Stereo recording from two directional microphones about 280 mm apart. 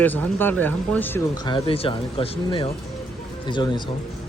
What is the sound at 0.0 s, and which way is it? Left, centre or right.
Speech, centre.